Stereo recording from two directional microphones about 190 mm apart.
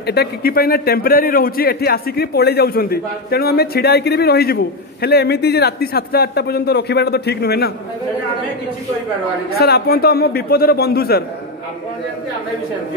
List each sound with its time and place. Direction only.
0.0 s a man's voice: 60° left (ahead or behind)
9.5 s a man's voice: 55° left (ahead or behind)